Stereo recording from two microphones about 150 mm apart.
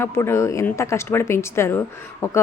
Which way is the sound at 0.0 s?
15° left (ahead or behind).